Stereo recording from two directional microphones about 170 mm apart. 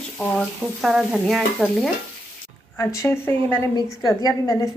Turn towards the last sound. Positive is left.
turn(degrees=20)  # may be behind; listen again after turning